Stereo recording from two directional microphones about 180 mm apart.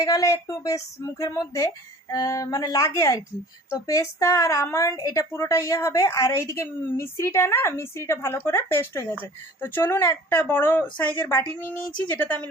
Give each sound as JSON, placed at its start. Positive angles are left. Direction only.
{"t": 0.0, "sound": "a woman's voice", "side_deg": 20}